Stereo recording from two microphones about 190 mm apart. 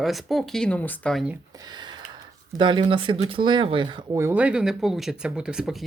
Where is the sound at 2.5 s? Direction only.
25° right (ahead or behind).